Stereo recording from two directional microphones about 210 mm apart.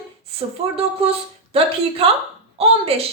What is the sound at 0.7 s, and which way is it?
Speech, 30° right (ahead or behind).